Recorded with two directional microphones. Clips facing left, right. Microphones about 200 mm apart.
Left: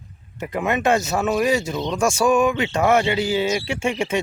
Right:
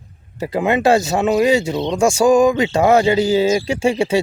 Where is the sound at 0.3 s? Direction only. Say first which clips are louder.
Right 5 dB; 30° right (ahead or behind).